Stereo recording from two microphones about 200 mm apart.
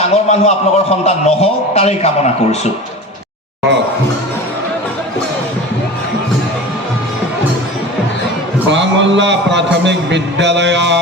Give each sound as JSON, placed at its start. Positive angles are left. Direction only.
{"t": 0.0, "sound": "a man's voice", "side_deg": 35}
{"t": 8.7, "sound": "a sound", "side_deg": -65}
{"t": 9.8, "sound": "speech", "side_deg": -60}